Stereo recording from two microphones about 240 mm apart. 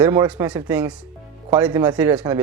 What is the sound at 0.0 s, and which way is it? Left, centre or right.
Speech, centre.